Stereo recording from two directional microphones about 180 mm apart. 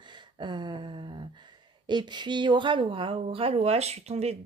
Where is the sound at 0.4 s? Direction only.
25° right (ahead or behind).